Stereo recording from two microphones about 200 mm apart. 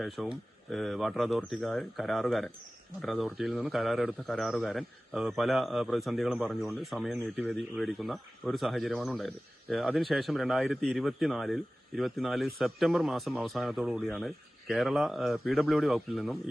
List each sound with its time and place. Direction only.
0.0 s speech: centre (ahead or behind)